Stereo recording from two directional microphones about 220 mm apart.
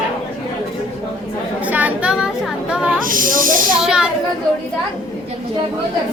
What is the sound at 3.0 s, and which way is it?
Snake, 40° right (ahead or behind).